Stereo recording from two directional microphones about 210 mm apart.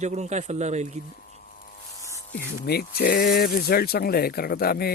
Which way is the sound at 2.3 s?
50° left (ahead or behind).